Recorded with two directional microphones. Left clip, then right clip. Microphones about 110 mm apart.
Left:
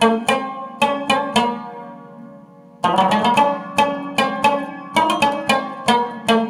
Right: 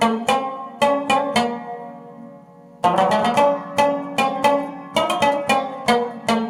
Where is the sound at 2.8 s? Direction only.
20° left (ahead or behind).